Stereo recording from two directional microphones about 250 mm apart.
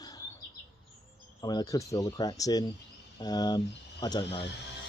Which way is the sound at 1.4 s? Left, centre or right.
Centre.